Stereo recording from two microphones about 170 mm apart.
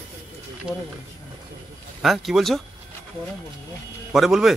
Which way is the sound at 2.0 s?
Centre (ahead or behind).